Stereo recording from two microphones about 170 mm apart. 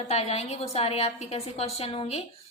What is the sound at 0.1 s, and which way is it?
A woman's voice, 40° left (ahead or behind).